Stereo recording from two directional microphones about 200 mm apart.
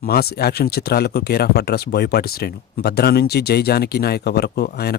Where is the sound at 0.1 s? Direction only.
50° left (ahead or behind).